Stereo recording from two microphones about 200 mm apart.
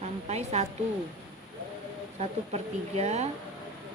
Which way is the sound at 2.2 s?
30° right (ahead or behind).